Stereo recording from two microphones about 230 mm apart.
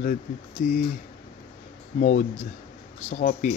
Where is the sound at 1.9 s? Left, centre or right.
Left.